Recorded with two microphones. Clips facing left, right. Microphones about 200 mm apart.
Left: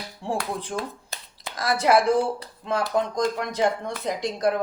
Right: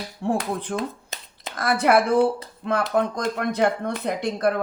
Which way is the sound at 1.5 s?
60° right (ahead or behind).